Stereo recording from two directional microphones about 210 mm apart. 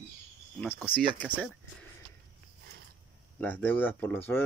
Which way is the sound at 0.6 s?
5° left (ahead or behind).